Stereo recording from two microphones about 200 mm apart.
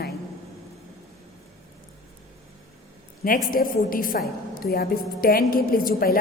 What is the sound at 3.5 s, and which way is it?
A woman's voice, 45° left (ahead or behind).